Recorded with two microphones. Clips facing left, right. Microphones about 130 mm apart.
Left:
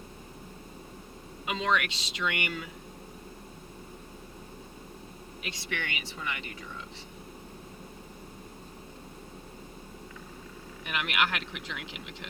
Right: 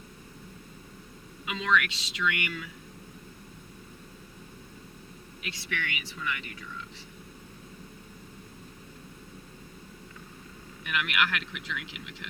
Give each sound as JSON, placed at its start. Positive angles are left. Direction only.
{"t": 1.5, "sound": "speech", "side_deg": 35}
{"t": 5.4, "sound": "speech", "side_deg": 30}
{"t": 10.8, "sound": "speech", "side_deg": 35}